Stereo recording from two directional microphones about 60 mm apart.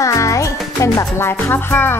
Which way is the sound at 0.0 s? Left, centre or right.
Left.